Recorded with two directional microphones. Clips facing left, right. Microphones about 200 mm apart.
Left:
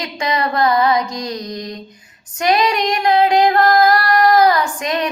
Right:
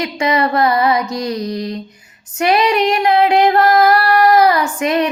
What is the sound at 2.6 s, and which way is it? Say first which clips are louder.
Singing: right 3 dB; 10° right (ahead or behind).